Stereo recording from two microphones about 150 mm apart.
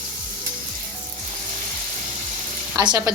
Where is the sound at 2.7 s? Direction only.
25° right (ahead or behind).